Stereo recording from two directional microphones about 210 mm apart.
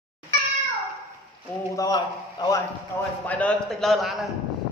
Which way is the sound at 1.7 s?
15° left (ahead or behind).